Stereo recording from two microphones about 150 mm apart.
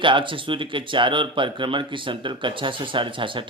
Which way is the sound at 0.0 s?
35° right (ahead or behind).